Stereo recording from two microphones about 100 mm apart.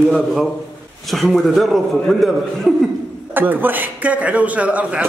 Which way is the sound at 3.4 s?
20° right (ahead or behind).